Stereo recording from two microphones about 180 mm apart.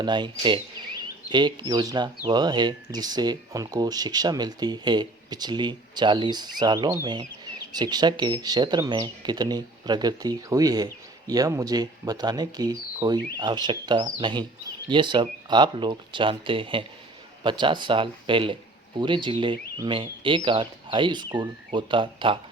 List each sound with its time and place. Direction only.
0.0 s speech: 25° right (ahead or behind)